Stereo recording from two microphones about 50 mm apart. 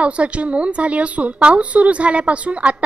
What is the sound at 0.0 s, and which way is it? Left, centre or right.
Speech, right.